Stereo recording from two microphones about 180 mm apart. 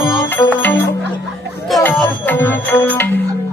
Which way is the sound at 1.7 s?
Centre (ahead or behind).